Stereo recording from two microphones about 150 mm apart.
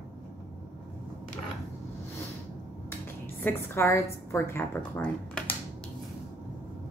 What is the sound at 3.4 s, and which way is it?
A woman's voice, 15° left (ahead or behind).